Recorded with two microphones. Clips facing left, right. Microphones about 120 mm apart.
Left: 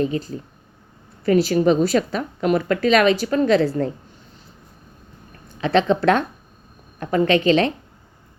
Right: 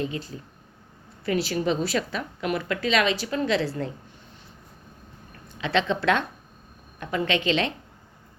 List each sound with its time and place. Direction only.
0.0 s a woman's voice: 45° left (ahead or behind)
5.5 s a woman's voice: 45° left (ahead or behind)